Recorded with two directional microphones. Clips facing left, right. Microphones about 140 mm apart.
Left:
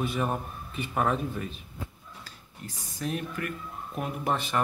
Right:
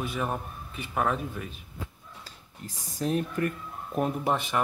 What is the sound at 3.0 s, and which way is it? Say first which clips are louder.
Speech: right 5 dB; 35° right (ahead or behind).